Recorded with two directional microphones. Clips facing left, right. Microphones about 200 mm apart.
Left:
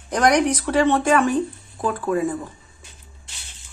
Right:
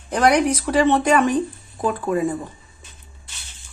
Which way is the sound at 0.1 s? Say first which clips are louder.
Right 1 dB; 10° right (ahead or behind).